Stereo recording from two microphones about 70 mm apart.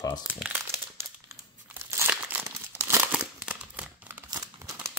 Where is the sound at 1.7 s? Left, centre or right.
Right.